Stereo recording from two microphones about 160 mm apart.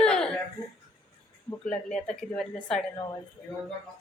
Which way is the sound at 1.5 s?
5° left (ahead or behind).